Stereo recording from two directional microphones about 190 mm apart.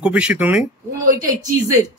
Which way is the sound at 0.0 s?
5° right (ahead or behind).